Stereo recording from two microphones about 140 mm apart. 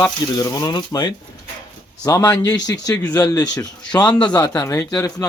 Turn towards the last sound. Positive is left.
turn(degrees=20)  # may be behind; listen again after turning